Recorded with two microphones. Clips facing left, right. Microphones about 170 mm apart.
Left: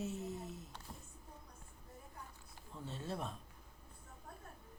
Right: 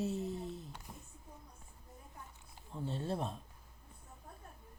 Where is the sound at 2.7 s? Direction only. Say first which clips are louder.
Right 5 dB; 30° right (ahead or behind).